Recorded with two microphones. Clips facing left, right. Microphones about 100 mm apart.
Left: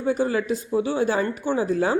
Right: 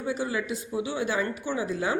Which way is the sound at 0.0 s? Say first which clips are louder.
Left 7 dB; 50° left (ahead or behind).